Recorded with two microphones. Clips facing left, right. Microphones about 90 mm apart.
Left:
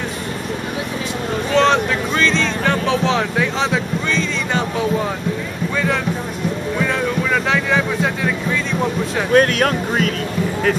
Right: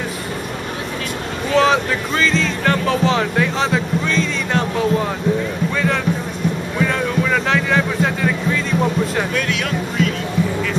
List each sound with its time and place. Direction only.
1.5 s speech: 5° right (ahead or behind)
7.5 s music: centre (ahead or behind)
9.3 s speech: 45° left (ahead or behind)